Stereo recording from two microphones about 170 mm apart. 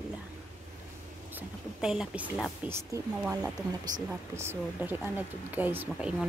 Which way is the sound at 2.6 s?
15° right (ahead or behind).